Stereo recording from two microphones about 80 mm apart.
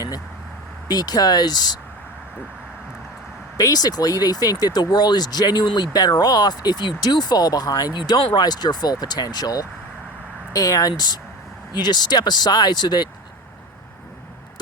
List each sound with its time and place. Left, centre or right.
0.9 s speech: left
3.6 s speech: left
7.9 s speech: left